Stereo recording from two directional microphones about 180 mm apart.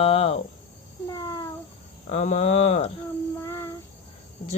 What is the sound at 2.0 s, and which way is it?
Speech, 40° left (ahead or behind).